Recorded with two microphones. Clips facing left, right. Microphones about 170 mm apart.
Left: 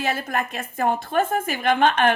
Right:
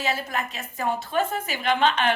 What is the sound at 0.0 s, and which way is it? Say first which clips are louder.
A woman's voice: left 3 dB; 55° left (ahead or behind).